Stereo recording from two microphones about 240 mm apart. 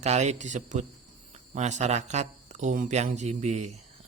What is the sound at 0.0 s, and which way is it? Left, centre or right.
A man's voice, right.